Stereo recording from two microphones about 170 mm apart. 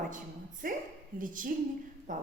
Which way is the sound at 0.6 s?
55° right (ahead or behind).